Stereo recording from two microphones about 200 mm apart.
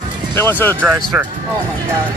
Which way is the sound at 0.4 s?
10° left (ahead or behind).